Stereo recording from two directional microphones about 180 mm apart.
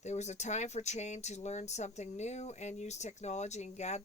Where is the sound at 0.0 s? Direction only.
40° left (ahead or behind).